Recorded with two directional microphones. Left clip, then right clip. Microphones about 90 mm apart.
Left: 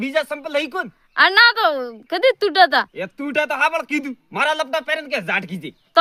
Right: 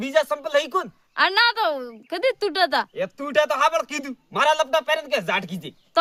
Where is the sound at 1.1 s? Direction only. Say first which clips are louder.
Left 6 dB; 30° left (ahead or behind).